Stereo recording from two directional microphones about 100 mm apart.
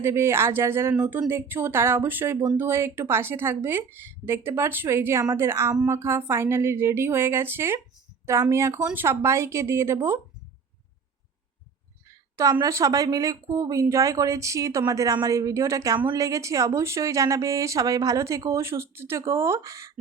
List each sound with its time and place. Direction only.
0.0 s a woman's voice: 25° right (ahead or behind)
12.6 s a woman's voice: 35° right (ahead or behind)